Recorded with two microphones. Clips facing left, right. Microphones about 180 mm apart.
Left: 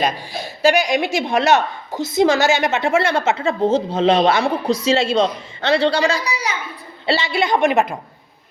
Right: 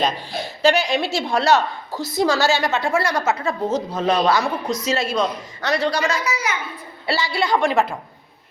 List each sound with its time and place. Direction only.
0.6 s a woman's voice: 10° left (ahead or behind)